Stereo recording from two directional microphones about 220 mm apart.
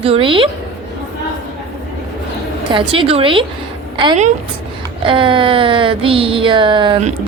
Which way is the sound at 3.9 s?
25° right (ahead or behind).